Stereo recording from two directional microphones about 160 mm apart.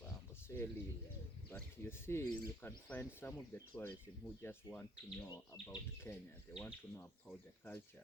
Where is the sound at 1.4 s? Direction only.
15° left (ahead or behind).